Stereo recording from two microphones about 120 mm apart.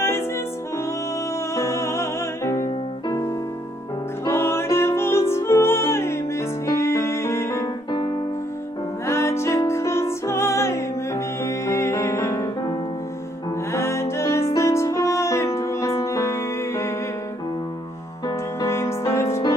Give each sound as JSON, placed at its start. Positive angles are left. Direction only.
{"t": 1.5, "sound": "music", "side_deg": 25}
{"t": 4.3, "sound": "music", "side_deg": 20}
{"t": 9.0, "sound": "music", "side_deg": 20}
{"t": 13.7, "sound": "music", "side_deg": 20}
{"t": 18.6, "sound": "music", "side_deg": 20}